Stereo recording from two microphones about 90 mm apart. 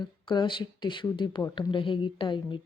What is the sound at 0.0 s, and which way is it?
Speech, 55° left (ahead or behind).